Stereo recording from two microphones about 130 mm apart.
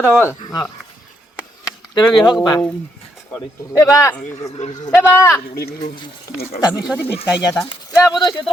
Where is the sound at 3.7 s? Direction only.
30° left (ahead or behind).